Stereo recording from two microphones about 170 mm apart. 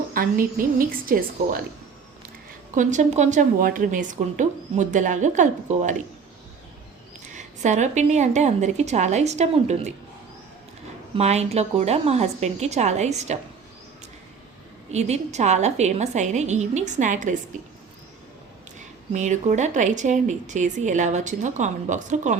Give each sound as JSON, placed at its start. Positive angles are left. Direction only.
{"t": 0.1, "sound": "a woman's voice", "side_deg": -55}
{"t": 2.7, "sound": "a woman's voice", "side_deg": -45}
{"t": 7.3, "sound": "a woman's voice", "side_deg": -45}
{"t": 11.1, "sound": "a woman's voice", "side_deg": -40}
{"t": 14.8, "sound": "a woman's voice", "side_deg": -40}
{"t": 18.8, "sound": "a woman's voice", "side_deg": -45}